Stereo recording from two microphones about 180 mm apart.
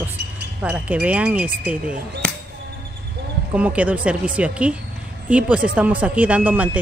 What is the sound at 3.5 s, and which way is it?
Speech, 5° right (ahead or behind).